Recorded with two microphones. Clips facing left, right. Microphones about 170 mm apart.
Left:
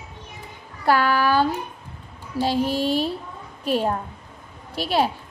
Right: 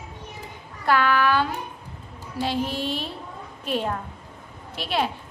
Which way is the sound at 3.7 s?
40° left (ahead or behind).